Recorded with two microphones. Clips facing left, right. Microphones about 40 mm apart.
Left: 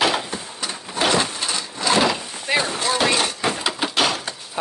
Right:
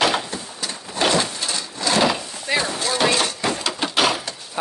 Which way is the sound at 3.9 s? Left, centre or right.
Centre.